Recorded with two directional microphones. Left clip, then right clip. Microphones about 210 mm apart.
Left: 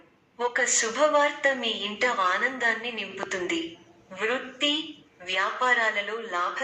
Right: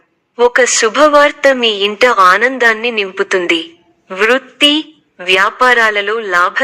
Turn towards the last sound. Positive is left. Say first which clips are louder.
# right 17 dB
turn(degrees=-45)  # may be behind; listen again after turning